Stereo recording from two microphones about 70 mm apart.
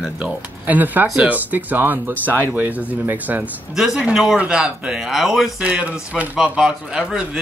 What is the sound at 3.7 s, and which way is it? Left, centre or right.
Speech, centre.